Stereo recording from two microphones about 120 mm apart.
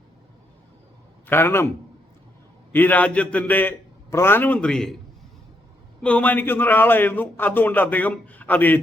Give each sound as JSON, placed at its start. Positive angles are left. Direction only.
{"t": 1.3, "sound": "a man's voice", "side_deg": 20}
{"t": 2.7, "sound": "a man's voice", "side_deg": 15}
{"t": 6.0, "sound": "a man's voice", "side_deg": 10}